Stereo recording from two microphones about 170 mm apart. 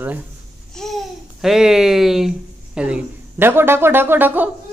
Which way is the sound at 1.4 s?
5° right (ahead or behind).